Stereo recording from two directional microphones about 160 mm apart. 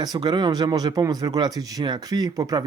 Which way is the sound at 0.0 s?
25° right (ahead or behind).